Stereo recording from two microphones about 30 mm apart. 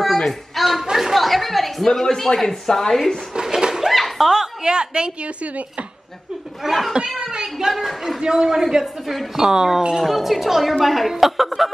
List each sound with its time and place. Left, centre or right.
0.0 s a sound: centre
1.1 s a woman's voice: centre
1.9 s speech: centre
3.3 s a sound: centre
3.9 s slap: centre
4.3 s speech: centre
4.7 s a woman's voice: right
6.6 s a woman's voice: centre
7.2 s a child's voice: right
8.6 s speech: centre
9.9 s a woman's voice: centre